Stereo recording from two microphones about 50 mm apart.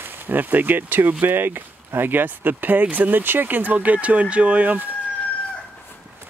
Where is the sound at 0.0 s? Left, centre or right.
Right.